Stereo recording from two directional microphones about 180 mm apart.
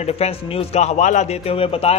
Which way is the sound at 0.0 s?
35° left (ahead or behind).